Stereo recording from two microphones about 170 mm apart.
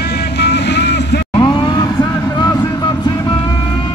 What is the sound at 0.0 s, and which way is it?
Vehicle, 75° left (ahead or behind).